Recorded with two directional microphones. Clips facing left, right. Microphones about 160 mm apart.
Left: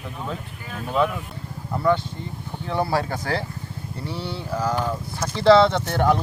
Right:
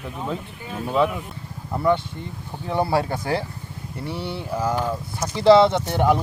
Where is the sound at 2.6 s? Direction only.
20° right (ahead or behind).